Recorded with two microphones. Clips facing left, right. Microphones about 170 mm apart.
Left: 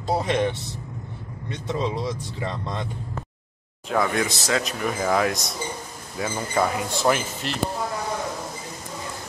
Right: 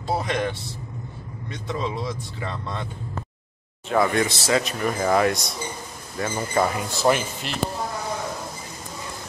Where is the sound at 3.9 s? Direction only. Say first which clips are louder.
Right 2 dB; centre (ahead or behind).